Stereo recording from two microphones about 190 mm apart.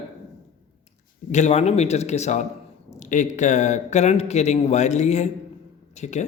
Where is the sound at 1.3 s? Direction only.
35° left (ahead or behind).